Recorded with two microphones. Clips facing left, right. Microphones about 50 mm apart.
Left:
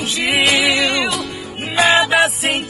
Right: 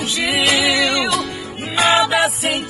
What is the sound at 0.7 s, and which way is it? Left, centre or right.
Music, left.